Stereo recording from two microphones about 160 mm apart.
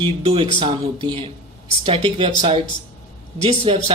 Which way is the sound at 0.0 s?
35° right (ahead or behind).